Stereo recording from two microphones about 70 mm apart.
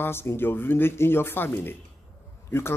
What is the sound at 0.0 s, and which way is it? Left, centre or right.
Speech, left.